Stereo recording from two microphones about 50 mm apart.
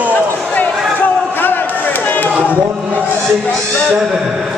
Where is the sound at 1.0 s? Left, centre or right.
Left.